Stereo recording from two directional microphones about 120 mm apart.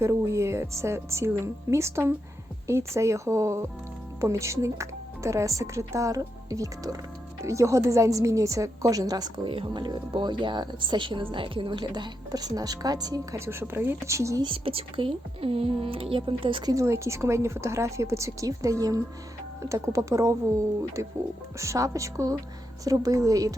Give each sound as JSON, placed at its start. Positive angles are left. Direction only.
{"t": 0.0, "sound": "a woman's voice", "side_deg": -25}
{"t": 14.4, "sound": "speech", "side_deg": -50}
{"t": 16.7, "sound": "speech", "side_deg": -25}
{"t": 21.6, "sound": "speech", "side_deg": -25}